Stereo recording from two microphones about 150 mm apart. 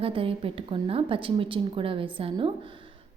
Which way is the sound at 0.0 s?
40° right (ahead or behind).